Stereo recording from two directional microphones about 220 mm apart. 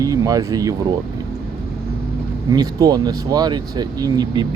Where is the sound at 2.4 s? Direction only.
15° right (ahead or behind).